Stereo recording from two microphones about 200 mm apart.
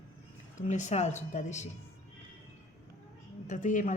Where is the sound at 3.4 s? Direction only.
40° left (ahead or behind).